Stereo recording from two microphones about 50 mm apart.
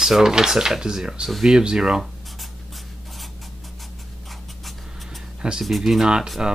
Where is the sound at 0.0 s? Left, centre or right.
Centre.